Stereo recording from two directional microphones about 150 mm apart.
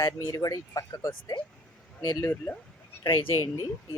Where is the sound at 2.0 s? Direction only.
20° left (ahead or behind).